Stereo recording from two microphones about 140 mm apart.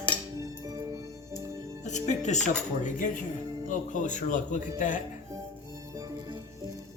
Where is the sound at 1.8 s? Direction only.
55° left (ahead or behind).